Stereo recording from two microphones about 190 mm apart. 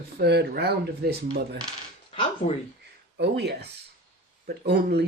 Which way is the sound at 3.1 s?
60° right (ahead or behind).